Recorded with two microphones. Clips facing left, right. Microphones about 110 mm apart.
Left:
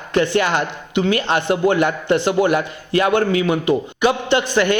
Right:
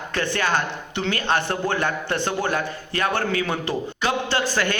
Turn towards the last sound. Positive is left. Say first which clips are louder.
# left 6 dB
turn(degrees=20)  # may be behind; listen again after turning